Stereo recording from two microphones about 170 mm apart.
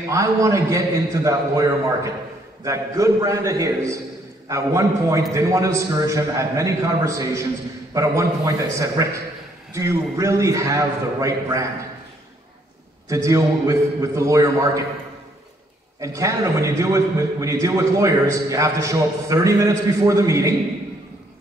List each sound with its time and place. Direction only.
0.1 s a man's voice: 20° right (ahead or behind)
13.1 s a man's voice: 20° right (ahead or behind)
16.0 s a man's voice: 20° right (ahead or behind)